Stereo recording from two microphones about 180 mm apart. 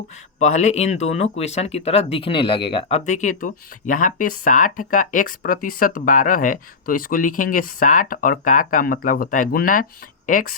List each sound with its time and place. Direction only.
0.3 s speech: 40° left (ahead or behind)